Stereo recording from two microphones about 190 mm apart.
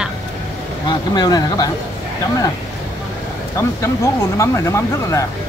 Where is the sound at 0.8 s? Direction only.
20° left (ahead or behind).